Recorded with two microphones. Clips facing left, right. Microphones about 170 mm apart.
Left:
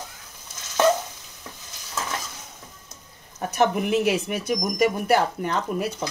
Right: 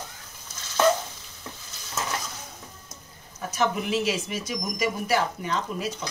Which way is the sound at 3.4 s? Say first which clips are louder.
Left 4 dB; 60° left (ahead or behind).